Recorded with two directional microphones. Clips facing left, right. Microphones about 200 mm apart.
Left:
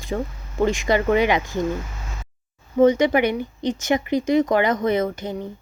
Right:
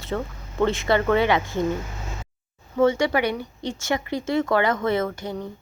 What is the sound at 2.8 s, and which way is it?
Speech, 20° left (ahead or behind).